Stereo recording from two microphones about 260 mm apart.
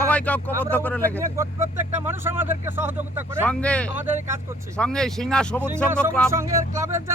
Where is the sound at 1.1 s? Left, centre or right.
Centre.